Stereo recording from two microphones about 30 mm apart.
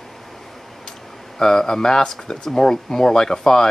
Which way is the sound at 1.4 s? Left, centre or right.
Centre.